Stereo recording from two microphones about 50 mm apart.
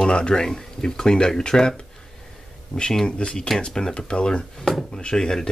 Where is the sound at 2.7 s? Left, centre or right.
Centre.